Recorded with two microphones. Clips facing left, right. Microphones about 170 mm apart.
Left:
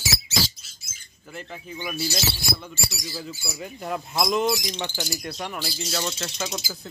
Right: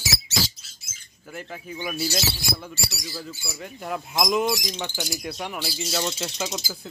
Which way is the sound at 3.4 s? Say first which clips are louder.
Left 1 dB; centre (ahead or behind).